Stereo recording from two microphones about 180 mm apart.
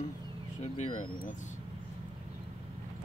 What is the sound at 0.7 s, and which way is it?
Vehicle, 45° left (ahead or behind).